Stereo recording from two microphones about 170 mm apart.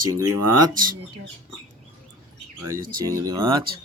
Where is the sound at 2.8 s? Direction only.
55° right (ahead or behind).